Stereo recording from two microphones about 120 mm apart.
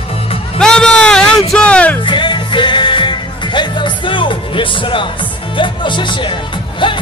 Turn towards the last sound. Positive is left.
turn(degrees=45)  # may be behind; listen again after turning